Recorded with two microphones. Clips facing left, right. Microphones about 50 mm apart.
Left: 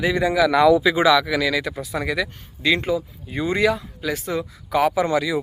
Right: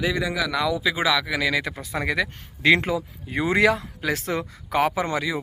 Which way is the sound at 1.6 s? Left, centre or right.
Right.